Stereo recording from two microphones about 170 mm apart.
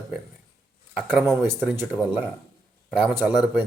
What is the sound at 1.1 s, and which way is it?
Speech, 15° right (ahead or behind).